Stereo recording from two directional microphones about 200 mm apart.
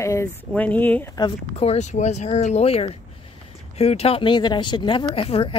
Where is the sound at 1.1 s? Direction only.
25° left (ahead or behind).